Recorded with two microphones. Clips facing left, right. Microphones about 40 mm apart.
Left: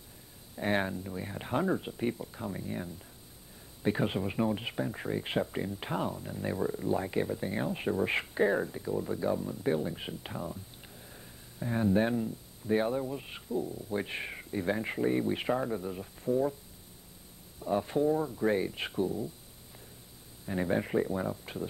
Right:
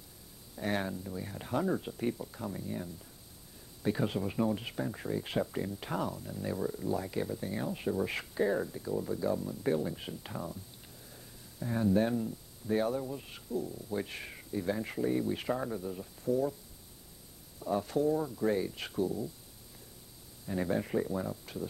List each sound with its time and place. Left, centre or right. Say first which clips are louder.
0.6 s speech: left 3 dB; left
11.0 s a sound: left 2 dB; left
12.6 s speech: left 2 dB; left
17.6 s speech: left 2 dB; left
20.4 s speech: left 2 dB; left